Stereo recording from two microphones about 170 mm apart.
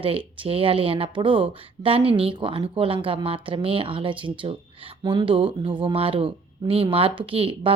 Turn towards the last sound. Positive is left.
turn(degrees=-30)  # may be behind; listen again after turning